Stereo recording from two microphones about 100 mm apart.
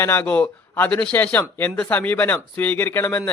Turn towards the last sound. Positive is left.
turn(degrees=20)  # may be behind; listen again after turning